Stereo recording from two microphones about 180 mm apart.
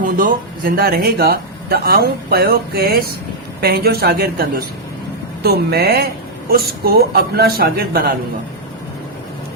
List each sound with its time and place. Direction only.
0.0 s a man's voice: 50° right (ahead or behind)